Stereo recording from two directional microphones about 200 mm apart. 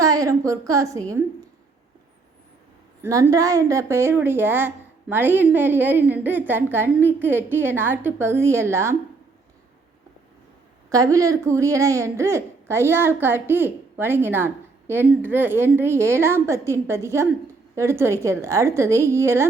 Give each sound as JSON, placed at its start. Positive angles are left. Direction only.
{"t": 0.0, "sound": "speech", "side_deg": -15}
{"t": 3.0, "sound": "speech", "side_deg": -15}
{"t": 10.8, "sound": "speech", "side_deg": -15}